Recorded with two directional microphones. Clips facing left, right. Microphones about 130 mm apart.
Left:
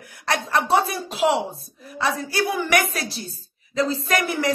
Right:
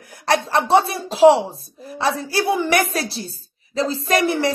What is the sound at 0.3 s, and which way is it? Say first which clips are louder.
Speech: right 4 dB; 30° right (ahead or behind).